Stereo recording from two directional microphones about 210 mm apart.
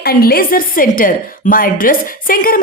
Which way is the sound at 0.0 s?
45° left (ahead or behind).